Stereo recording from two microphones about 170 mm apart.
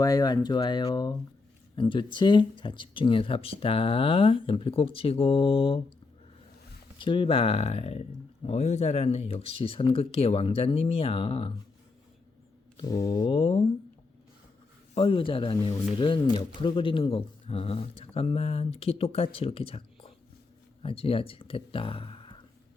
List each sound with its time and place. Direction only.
0.0 s speech: 20° left (ahead or behind)
7.0 s speech: 30° left (ahead or behind)
12.8 s speech: 20° left (ahead or behind)
13.3 s speech: 35° left (ahead or behind)
14.9 s speech: 30° left (ahead or behind)